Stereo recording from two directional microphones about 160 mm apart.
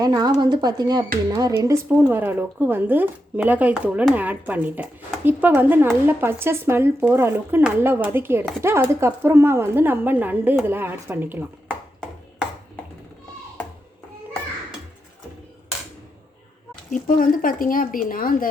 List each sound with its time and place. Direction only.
0.0 s speech: 25° right (ahead or behind)
16.9 s speech: 60° left (ahead or behind)